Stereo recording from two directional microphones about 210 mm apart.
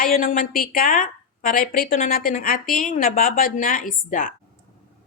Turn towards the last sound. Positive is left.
turn(degrees=40)  # may be behind; listen again after turning